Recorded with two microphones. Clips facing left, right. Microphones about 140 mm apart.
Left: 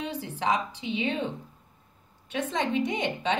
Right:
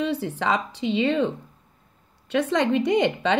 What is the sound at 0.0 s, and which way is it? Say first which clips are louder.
A woman's voice: right 6 dB; 65° right (ahead or behind).